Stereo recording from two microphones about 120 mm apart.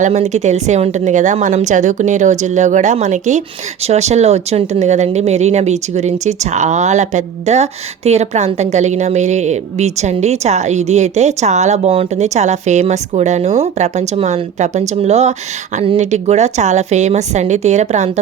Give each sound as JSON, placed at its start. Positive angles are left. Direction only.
{"t": 0.0, "sound": "a woman's voice", "side_deg": -70}
{"t": 3.8, "sound": "speech", "side_deg": -65}